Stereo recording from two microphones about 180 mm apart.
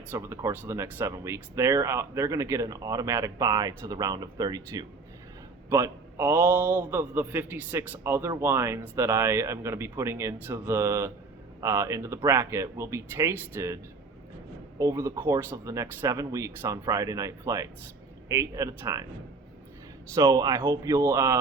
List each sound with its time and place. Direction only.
0.1 s speech: 15° right (ahead or behind)
14.8 s speech: 15° right (ahead or behind)
20.1 s speech: 20° right (ahead or behind)